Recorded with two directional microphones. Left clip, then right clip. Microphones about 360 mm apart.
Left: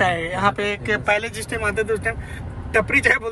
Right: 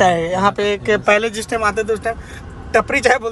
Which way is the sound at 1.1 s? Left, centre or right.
Right.